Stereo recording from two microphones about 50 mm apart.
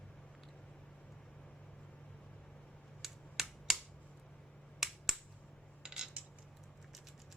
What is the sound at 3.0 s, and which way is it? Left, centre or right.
Finger snapping, centre.